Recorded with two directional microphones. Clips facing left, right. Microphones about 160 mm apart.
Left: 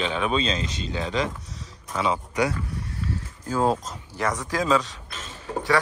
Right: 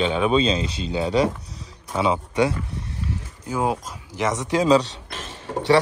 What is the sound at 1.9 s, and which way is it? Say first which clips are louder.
Speech: right 4 dB; 25° right (ahead or behind).